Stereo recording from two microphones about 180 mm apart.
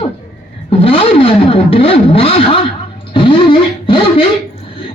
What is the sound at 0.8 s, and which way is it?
Music, 30° left (ahead or behind).